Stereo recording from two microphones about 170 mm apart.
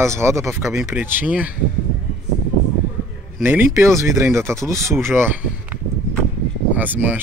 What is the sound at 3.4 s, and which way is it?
Speech, 10° right (ahead or behind).